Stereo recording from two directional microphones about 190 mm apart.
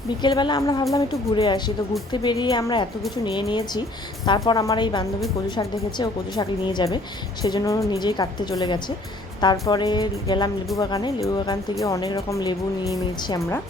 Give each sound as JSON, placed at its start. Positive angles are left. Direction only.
{"t": 0.2, "sound": "speech", "side_deg": 25}